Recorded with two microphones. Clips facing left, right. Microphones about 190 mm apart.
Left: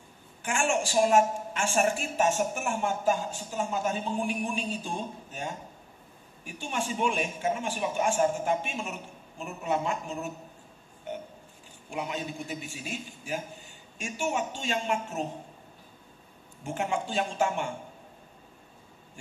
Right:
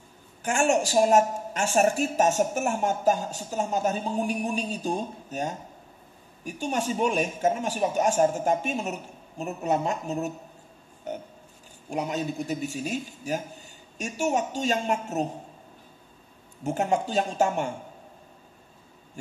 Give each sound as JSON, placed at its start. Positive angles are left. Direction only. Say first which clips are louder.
{"t": 0.4, "sound": "a woman's voice", "louder": "right 5 dB", "side_deg": -40}
{"t": 16.6, "sound": "a woman's voice", "louder": "right 5 dB", "side_deg": -40}